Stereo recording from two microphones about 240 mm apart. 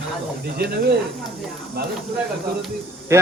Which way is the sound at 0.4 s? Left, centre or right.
Right.